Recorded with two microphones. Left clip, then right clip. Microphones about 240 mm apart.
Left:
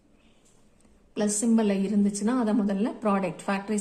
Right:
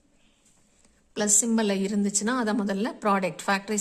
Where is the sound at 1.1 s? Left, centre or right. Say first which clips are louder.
Right 1 dB; right.